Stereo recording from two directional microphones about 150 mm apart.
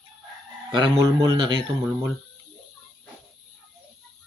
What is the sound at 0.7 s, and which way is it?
Speech, 30° right (ahead or behind).